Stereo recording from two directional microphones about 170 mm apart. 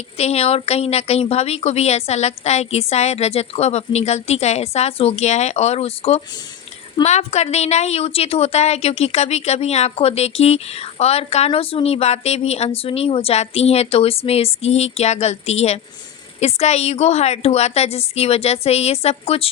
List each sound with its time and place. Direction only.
0.2 s a woman's voice: 40° left (ahead or behind)